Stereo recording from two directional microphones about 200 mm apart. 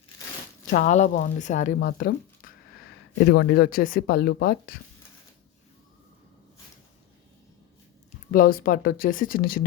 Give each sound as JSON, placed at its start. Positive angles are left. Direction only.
{"t": 0.7, "sound": "a woman's voice", "side_deg": 35}
{"t": 1.9, "sound": "speech", "side_deg": 50}
{"t": 8.3, "sound": "speech", "side_deg": 45}